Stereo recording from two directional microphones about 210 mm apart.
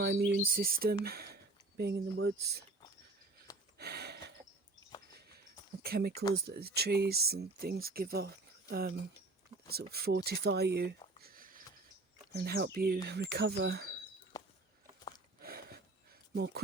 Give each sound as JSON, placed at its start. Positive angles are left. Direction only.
{"t": 0.0, "sound": "speech", "side_deg": -50}
{"t": 3.8, "sound": "a sound", "side_deg": -50}
{"t": 5.8, "sound": "speech", "side_deg": -50}
{"t": 11.2, "sound": "sniff", "side_deg": -45}
{"t": 12.5, "sound": "speech", "side_deg": -50}
{"t": 15.4, "sound": "a sound", "side_deg": -45}
{"t": 16.3, "sound": "speech", "side_deg": -55}